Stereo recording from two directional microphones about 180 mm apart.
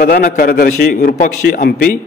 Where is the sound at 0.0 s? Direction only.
55° left (ahead or behind).